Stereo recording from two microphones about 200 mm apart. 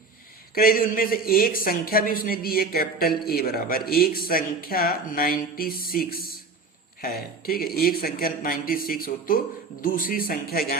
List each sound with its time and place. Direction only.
0.5 s speech: 45° left (ahead or behind)